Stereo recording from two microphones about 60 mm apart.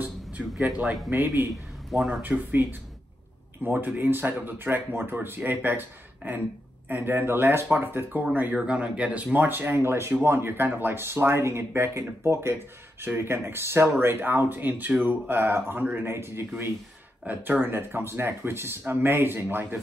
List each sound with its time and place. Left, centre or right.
0.4 s a man's voice: centre
1.1 s speech: right
1.9 s speech: centre
2.2 s speech: right
13.0 s speech: right
16.1 s speech: right